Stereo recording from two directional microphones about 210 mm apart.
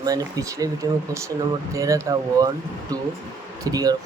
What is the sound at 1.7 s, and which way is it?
Speech, 15° right (ahead or behind).